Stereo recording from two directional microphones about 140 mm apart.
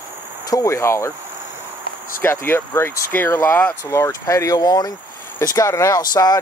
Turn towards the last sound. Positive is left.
turn(degrees=25)  # may be behind; listen again after turning